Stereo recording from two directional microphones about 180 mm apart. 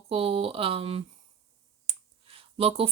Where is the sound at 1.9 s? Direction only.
30° right (ahead or behind).